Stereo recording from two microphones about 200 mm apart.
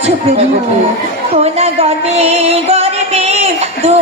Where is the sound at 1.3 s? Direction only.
30° right (ahead or behind).